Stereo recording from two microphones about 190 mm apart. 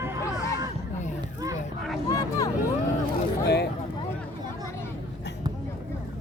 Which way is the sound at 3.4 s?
60° left (ahead or behind).